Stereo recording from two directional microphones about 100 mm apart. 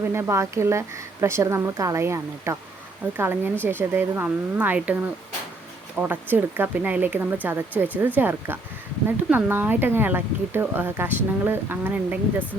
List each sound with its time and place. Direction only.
0.1 s speech: 25° right (ahead or behind)